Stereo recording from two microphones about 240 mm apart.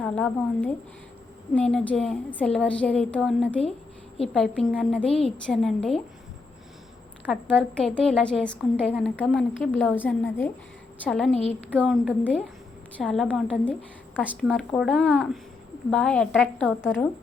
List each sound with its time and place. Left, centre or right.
0.0 s a woman's voice: centre
7.3 s a woman's voice: centre